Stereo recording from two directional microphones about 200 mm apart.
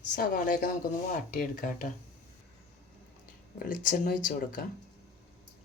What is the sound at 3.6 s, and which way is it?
Speech, 45° left (ahead or behind).